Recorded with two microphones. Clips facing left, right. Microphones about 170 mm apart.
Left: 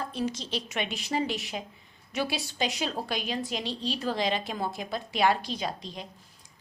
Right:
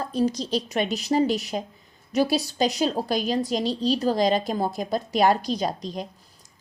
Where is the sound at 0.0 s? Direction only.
40° right (ahead or behind).